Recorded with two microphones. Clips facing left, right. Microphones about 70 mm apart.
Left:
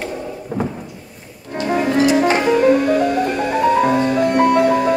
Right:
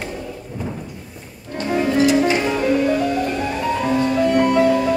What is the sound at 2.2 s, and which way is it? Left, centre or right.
Music, left.